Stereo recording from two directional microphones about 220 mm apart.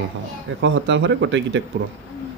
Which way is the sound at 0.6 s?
55° right (ahead or behind).